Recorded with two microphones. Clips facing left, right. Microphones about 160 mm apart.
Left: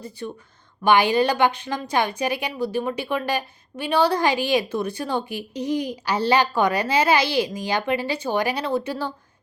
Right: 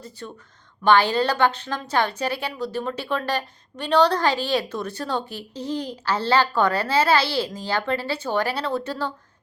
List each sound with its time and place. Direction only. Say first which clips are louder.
0.2 s a woman's voice: left 7 dB; 15° left (ahead or behind)